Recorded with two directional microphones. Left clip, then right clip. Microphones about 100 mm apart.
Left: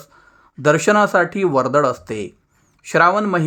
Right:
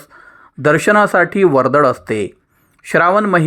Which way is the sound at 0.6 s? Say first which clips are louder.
Right 3 dB; 35° right (ahead or behind).